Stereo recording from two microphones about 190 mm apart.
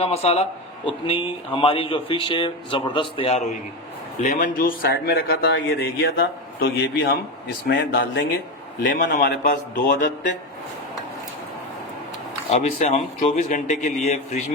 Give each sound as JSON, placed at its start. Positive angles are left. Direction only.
{"t": 0.0, "sound": "a man's voice", "side_deg": 35}
{"t": 12.5, "sound": "speech", "side_deg": 35}